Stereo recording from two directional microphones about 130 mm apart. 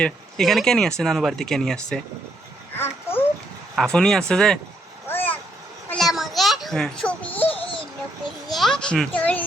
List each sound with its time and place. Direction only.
0.0 s speech: 5° left (ahead or behind)
2.7 s babbling: 15° left (ahead or behind)
3.8 s speech: 5° left (ahead or behind)
5.0 s vehicle: 15° left (ahead or behind)
5.9 s a sound: centre (ahead or behind)
8.4 s a sound: centre (ahead or behind)